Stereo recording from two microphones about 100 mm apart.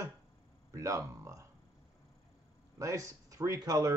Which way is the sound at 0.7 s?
30° right (ahead or behind).